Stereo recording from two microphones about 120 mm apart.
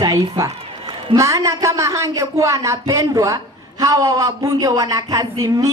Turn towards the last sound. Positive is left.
turn(degrees=-30)  # may be behind; listen again after turning